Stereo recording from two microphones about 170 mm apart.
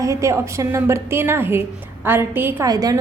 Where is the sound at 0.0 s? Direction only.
20° right (ahead or behind).